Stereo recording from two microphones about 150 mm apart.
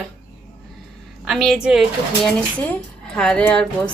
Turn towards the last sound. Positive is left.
turn(degrees=5)  # may be behind; listen again after turning